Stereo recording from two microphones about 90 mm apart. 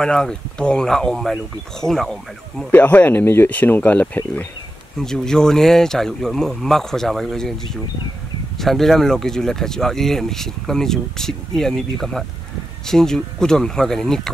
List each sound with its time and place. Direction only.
0.0 s speech: 5° left (ahead or behind)
2.7 s speech: 20° left (ahead or behind)
4.9 s speech: 5° left (ahead or behind)